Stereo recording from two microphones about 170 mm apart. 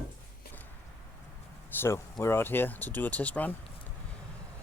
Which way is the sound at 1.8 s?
15° left (ahead or behind).